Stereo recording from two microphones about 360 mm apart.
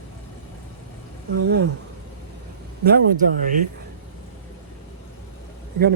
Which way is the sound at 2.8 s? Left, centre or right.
Right.